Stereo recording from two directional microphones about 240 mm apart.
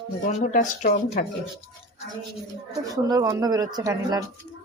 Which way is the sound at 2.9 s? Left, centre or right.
Centre.